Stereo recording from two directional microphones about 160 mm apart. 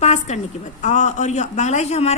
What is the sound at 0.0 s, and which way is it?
A woman's voice, 45° left (ahead or behind).